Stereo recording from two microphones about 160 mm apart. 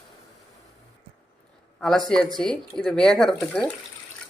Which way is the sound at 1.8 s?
Centre (ahead or behind).